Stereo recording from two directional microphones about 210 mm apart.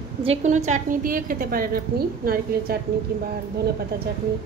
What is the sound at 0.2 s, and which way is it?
A woman's voice, 30° right (ahead or behind).